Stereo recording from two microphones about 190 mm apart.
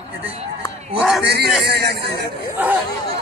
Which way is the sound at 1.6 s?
60° right (ahead or behind).